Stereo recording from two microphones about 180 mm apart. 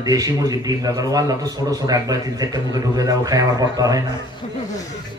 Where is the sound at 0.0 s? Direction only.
20° right (ahead or behind).